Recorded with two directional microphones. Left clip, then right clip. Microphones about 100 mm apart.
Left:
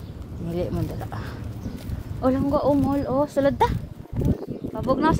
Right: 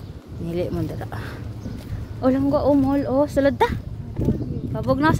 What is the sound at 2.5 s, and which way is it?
Speech, 40° right (ahead or behind).